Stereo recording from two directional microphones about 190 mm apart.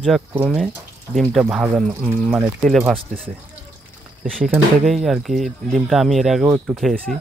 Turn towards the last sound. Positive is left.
turn(degrees=0)  # may be behind; listen again after turning